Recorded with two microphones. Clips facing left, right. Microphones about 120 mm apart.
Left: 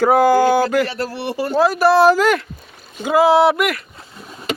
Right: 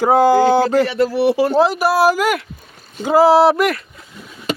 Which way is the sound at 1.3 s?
90° right.